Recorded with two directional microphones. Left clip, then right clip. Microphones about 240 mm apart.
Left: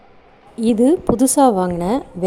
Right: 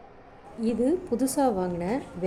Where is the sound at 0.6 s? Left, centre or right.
Left.